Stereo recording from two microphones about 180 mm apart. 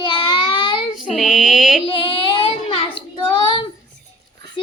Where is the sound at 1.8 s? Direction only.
30° left (ahead or behind).